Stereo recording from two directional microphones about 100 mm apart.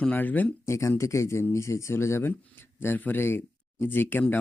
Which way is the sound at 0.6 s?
30° left (ahead or behind).